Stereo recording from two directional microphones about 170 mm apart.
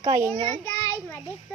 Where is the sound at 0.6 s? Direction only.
15° left (ahead or behind).